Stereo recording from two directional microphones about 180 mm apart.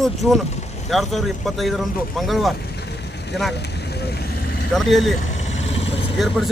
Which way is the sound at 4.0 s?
60° left (ahead or behind).